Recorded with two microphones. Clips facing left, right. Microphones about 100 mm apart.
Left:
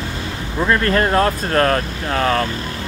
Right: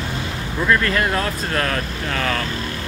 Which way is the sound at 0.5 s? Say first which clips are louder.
Left 2 dB; 30° left (ahead or behind).